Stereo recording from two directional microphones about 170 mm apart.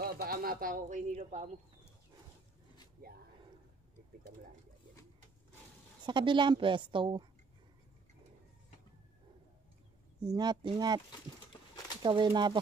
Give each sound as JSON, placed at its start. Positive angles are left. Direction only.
{"t": 0.0, "sound": "a man's voice", "side_deg": -65}
{"t": 6.0, "sound": "a woman's voice", "side_deg": -30}
{"t": 10.2, "sound": "a woman's voice", "side_deg": -25}
{"t": 11.1, "sound": "a sound", "side_deg": 25}
{"t": 12.0, "sound": "a woman's voice", "side_deg": -25}